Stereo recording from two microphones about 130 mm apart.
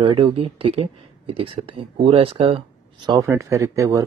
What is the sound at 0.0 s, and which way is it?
Speech, 40° right (ahead or behind).